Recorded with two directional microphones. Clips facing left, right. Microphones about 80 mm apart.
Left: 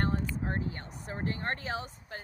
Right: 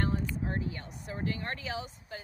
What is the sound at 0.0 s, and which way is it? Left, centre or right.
Speech, left.